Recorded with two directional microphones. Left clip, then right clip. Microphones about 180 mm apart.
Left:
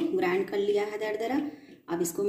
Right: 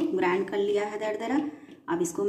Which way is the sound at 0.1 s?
25° right (ahead or behind).